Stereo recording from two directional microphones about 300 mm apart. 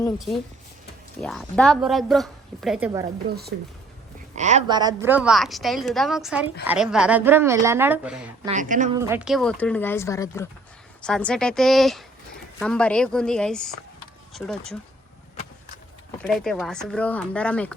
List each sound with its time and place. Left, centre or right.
0.0 s a woman's voice: centre
3.5 s speech: right
4.4 s a woman's voice: right; by 8.3 s centre
8.4 s a woman's voice: right
9.0 s a woman's voice: centre
16.2 s a woman's voice: centre